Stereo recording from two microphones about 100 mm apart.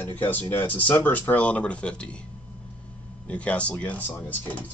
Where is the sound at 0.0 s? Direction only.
20° left (ahead or behind).